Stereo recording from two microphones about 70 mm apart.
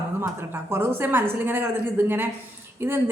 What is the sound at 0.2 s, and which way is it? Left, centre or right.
A woman's voice, right.